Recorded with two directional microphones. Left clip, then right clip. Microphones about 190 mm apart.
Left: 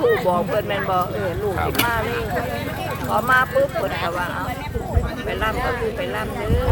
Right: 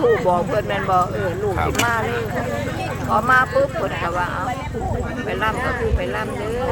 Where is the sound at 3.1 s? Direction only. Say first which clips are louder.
Right 2 dB; 5° right (ahead or behind).